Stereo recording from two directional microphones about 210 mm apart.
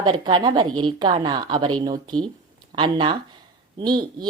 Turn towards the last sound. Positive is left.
turn(degrees=-20)  # may be behind; listen again after turning